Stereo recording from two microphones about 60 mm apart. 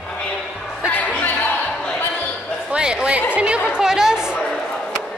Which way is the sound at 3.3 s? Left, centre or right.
Centre.